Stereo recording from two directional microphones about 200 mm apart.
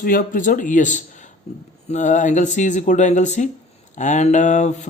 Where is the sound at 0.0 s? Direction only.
45° left (ahead or behind).